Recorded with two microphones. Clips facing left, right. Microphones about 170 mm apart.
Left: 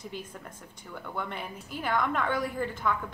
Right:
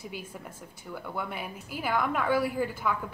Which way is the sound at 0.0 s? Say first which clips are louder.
Even; 10° right (ahead or behind).